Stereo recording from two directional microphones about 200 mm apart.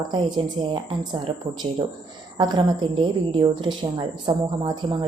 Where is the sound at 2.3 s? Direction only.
20° right (ahead or behind).